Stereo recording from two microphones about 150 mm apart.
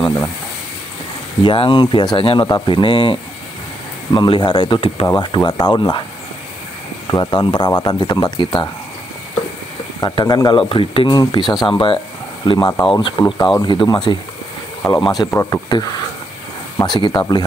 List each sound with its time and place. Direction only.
1.4 s speech: 35° left (ahead or behind)
7.1 s speech: 30° left (ahead or behind)
9.9 s speech: 25° left (ahead or behind)